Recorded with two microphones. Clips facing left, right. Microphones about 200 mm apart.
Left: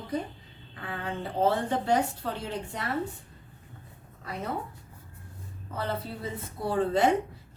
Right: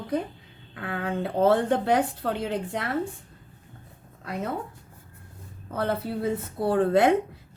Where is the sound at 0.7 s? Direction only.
65° right (ahead or behind).